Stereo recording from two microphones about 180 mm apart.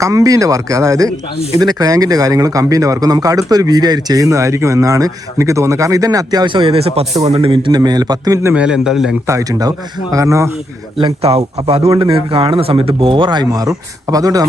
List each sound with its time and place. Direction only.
0.0 s speech: 20° right (ahead or behind)
8.5 s a man's voice: 5° right (ahead or behind)
9.2 s speech: 20° right (ahead or behind)
11.0 s a man's voice: 35° right (ahead or behind)